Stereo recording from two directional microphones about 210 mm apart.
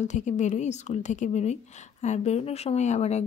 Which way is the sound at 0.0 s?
35° left (ahead or behind).